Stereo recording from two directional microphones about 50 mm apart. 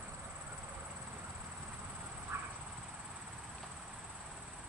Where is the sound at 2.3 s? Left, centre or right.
Right.